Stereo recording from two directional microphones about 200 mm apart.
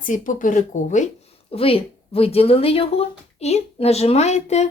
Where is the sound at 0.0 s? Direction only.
40° left (ahead or behind).